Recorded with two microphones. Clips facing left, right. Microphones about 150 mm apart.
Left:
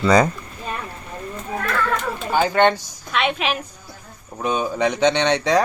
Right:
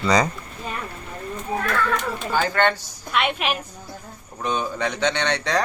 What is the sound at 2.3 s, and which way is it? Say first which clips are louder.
Speech: left 4 dB; 15° left (ahead or behind).